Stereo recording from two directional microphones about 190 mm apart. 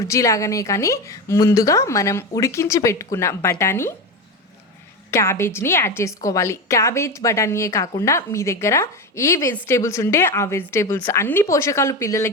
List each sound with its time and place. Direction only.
0.0 s a woman's voice: 15° left (ahead or behind)
5.1 s a woman's voice: 15° left (ahead or behind)